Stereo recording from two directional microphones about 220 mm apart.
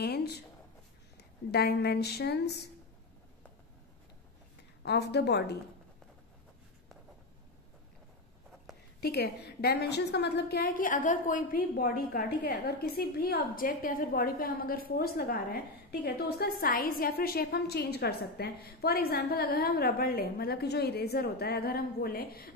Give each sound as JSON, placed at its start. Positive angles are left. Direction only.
{"t": 0.0, "sound": "a sound", "side_deg": 45}
{"t": 1.5, "sound": "a woman's voice", "side_deg": 50}
{"t": 4.8, "sound": "a woman's voice", "side_deg": 50}
{"t": 9.0, "sound": "a woman's voice", "side_deg": 45}